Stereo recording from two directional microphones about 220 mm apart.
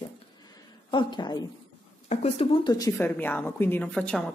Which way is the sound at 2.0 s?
25° left (ahead or behind).